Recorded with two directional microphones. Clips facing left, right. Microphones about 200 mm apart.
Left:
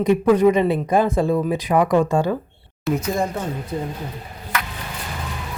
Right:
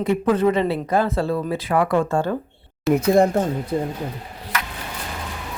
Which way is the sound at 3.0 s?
55° right (ahead or behind).